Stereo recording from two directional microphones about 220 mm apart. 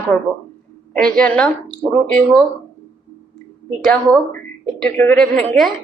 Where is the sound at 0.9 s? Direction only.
5° left (ahead or behind).